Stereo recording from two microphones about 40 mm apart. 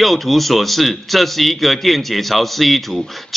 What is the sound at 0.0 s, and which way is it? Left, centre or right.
A man's voice, centre.